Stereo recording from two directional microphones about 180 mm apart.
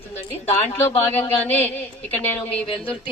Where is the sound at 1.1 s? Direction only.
10° left (ahead or behind).